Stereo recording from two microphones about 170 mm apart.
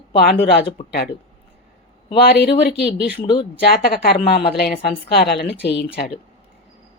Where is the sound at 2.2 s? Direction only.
75° left (ahead or behind).